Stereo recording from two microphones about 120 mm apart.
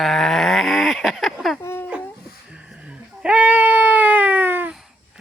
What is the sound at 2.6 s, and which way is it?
Sheep, 10° right (ahead or behind).